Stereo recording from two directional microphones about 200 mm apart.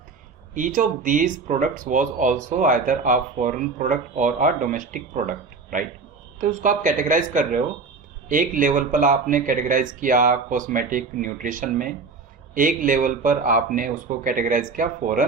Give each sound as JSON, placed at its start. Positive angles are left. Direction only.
{"t": 0.5, "sound": "speech", "side_deg": -40}